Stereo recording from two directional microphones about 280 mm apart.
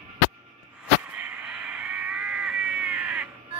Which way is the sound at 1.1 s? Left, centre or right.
Centre.